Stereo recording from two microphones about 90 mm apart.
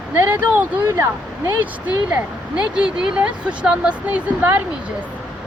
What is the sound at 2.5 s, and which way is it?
Speech, 10° right (ahead or behind).